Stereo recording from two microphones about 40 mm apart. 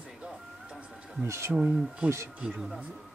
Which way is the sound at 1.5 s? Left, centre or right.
Right.